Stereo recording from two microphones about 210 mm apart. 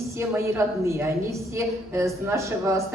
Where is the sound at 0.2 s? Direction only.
15° right (ahead or behind).